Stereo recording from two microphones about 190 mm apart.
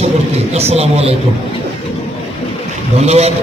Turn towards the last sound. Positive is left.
turn(degrees=-35)  # may be behind; listen again after turning